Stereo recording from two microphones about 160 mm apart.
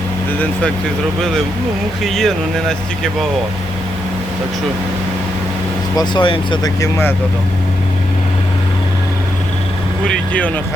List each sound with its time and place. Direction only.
2.0 s speech: centre (ahead or behind)
6.0 s speech: 30° left (ahead or behind)
10.1 s speech: 10° left (ahead or behind)